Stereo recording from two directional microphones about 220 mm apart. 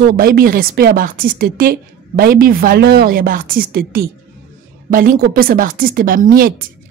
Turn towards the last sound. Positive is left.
turn(degrees=-40)  # may be behind; listen again after turning